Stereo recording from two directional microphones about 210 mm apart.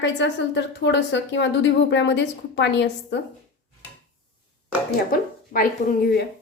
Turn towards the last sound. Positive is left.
turn(degrees=45)  # may be behind; listen again after turning